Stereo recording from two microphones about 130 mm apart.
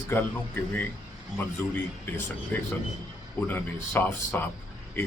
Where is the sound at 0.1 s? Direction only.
15° left (ahead or behind).